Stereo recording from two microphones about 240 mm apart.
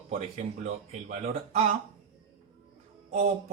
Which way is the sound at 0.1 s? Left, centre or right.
Right.